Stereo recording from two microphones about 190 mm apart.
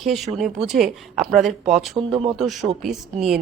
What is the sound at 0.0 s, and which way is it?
Speech, centre (ahead or behind).